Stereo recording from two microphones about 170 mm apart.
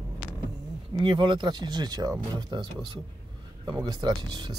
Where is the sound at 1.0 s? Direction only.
30° right (ahead or behind).